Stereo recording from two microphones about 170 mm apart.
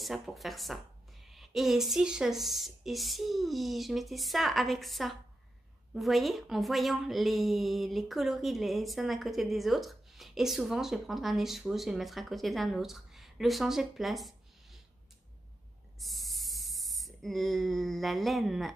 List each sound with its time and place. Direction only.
0.0 s a woman's voice: centre (ahead or behind)
16.0 s spray: centre (ahead or behind)